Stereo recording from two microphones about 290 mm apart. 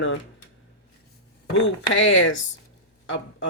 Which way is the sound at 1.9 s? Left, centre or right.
Left.